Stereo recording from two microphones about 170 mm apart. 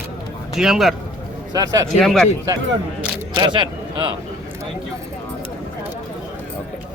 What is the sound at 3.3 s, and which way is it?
Speech, 25° right (ahead or behind).